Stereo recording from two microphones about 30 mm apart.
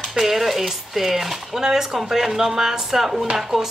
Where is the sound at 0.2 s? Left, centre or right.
Centre.